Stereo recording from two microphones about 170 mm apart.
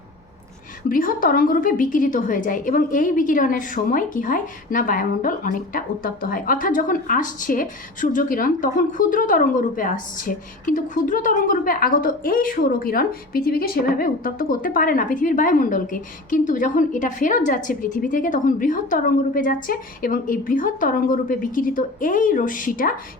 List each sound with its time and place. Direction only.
0.9 s a woman's voice: 55° left (ahead or behind)